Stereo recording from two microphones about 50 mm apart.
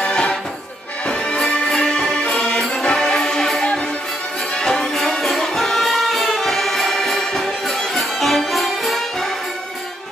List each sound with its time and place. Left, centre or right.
0.0 s music: centre
1.4 s music: centre